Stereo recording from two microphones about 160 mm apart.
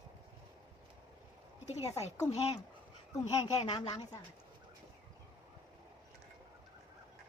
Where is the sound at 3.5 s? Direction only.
25° left (ahead or behind).